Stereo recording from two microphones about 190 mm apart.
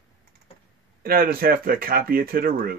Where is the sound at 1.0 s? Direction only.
50° right (ahead or behind).